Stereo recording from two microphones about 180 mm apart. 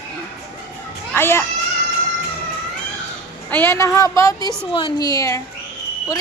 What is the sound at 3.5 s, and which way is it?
A woman's voice, 10° left (ahead or behind).